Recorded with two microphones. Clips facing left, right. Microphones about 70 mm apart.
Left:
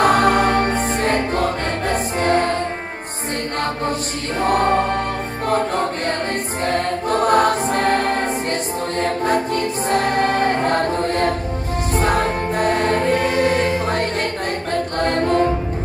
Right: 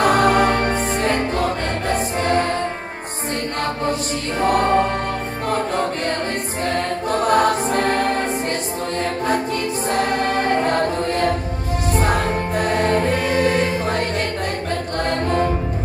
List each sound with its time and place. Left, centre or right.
0.0 s music: left
4.4 s choir: left
5.5 s music: left